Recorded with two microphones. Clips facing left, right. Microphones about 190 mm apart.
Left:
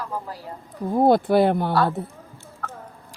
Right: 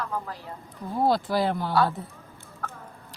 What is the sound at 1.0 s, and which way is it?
Speech, 60° left (ahead or behind).